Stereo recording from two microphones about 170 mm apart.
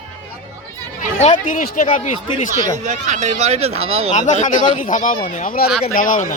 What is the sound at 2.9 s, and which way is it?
Speech, 45° right (ahead or behind).